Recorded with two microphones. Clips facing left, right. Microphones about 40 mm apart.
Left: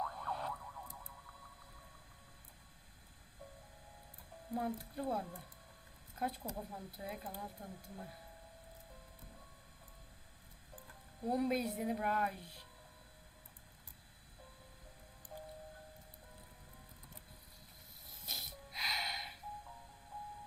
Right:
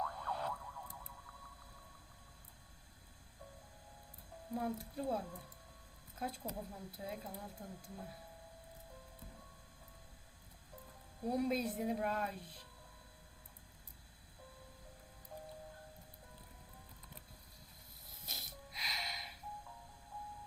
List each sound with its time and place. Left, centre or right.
0.0 s a sound: centre
4.4 s speech: centre
7.4 s speech: centre
11.2 s speech: centre
15.3 s music: centre
18.1 s music: centre
20.1 s radio: left